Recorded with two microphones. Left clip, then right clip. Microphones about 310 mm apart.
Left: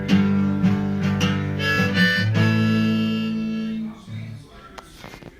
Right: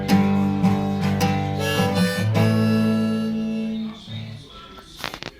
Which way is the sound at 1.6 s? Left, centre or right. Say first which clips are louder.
Left 4 dB; right.